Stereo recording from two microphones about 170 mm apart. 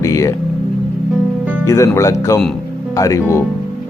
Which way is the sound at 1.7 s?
15° left (ahead or behind).